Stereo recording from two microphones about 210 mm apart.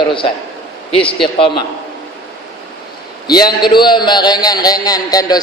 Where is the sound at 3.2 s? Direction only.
20° left (ahead or behind).